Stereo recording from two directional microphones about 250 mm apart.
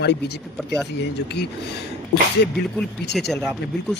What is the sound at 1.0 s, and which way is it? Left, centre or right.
Speech, left.